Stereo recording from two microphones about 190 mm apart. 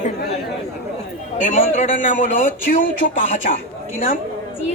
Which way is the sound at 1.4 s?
40° left (ahead or behind).